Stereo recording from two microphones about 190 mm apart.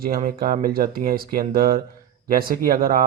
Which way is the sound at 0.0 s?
50° right (ahead or behind).